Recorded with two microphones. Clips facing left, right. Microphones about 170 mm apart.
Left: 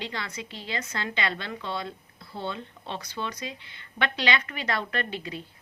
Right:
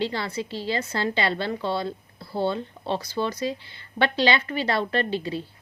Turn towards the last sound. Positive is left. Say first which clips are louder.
# right 7 dB
turn(degrees=-30)  # may be behind; listen again after turning